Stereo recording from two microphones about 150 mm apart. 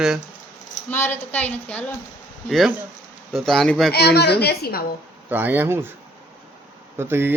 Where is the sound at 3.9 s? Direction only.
90° left.